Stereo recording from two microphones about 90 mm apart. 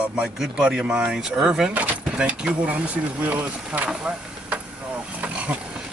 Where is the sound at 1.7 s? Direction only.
20° right (ahead or behind).